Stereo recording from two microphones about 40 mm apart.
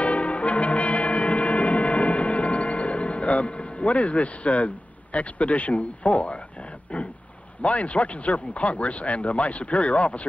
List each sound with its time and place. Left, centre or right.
0.0 s brass instrument: left
6.9 s a sound: left
7.6 s speech: left